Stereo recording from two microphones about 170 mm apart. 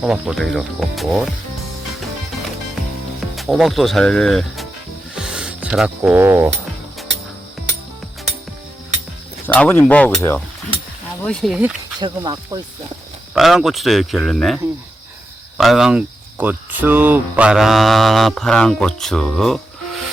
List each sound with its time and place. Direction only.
0.0 s speech: 5° right (ahead or behind)
3.3 s speech: centre (ahead or behind)
5.1 s music: 5° right (ahead or behind)
9.5 s speech: 10° left (ahead or behind)
11.9 s speech: 25° right (ahead or behind)
13.3 s speech: centre (ahead or behind)